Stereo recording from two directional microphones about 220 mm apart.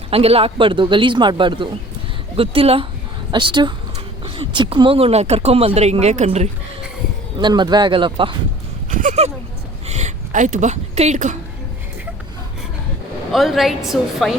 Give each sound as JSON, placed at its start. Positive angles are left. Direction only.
{"t": 0.1, "sound": "speech", "side_deg": -25}
{"t": 7.3, "sound": "speech", "side_deg": -20}
{"t": 8.9, "sound": "a sound", "side_deg": -35}
{"t": 9.8, "sound": "a woman's voice", "side_deg": -30}
{"t": 13.3, "sound": "a woman's voice", "side_deg": 0}